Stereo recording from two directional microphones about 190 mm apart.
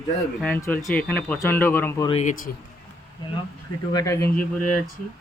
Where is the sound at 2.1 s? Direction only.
40° left (ahead or behind).